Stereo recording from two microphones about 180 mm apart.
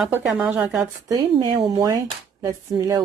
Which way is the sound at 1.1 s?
20° right (ahead or behind).